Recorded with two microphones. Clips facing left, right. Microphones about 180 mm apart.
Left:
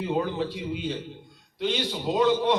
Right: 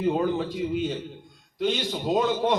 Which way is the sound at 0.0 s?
45° right (ahead or behind).